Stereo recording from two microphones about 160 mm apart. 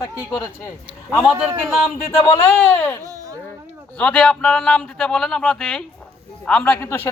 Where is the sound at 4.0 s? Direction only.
5° left (ahead or behind).